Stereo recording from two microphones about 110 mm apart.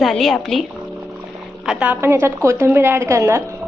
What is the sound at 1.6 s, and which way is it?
A woman's voice, 10° right (ahead or behind).